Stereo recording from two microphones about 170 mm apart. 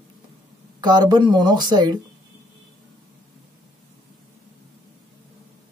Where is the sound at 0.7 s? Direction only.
25° right (ahead or behind).